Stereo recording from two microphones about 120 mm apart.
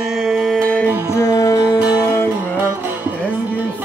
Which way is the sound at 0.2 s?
Centre (ahead or behind).